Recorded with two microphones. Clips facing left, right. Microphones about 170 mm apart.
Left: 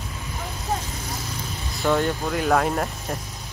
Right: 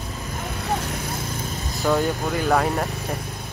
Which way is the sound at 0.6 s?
65° right (ahead or behind).